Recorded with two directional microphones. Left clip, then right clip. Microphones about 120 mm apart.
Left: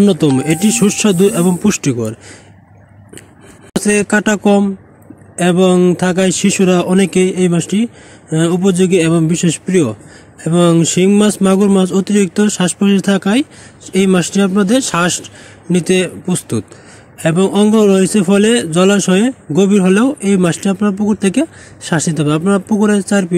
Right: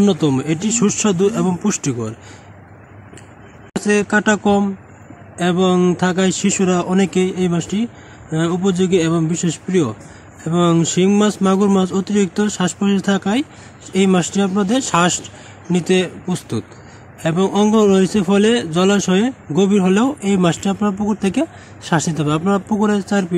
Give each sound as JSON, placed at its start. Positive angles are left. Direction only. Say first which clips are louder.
{"t": 0.0, "sound": "speech", "louder": "left 4 dB", "side_deg": 40}
{"t": 3.7, "sound": "speech", "louder": "left 3 dB", "side_deg": 45}